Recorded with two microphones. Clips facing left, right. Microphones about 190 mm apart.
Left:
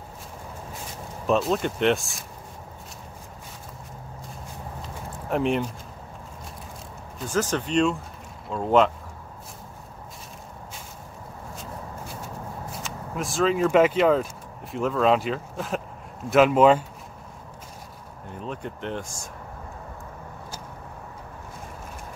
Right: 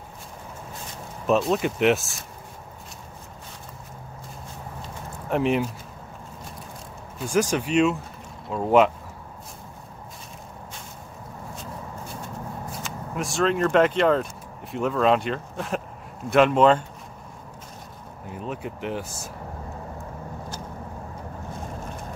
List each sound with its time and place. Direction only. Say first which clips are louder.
1.2 s speech: right 1 dB; centre (ahead or behind)
5.3 s speech: right 1 dB; 5° right (ahead or behind)
7.3 s speech: right 2 dB; 10° right (ahead or behind)
12.8 s speech: right 1 dB; centre (ahead or behind)
18.3 s speech: right 1 dB; 5° right (ahead or behind)